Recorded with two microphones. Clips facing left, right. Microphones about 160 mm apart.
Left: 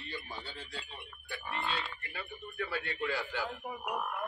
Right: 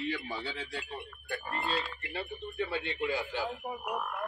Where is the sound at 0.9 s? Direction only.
45° right (ahead or behind).